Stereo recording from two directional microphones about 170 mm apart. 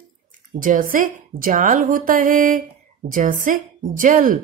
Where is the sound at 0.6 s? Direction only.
55° right (ahead or behind).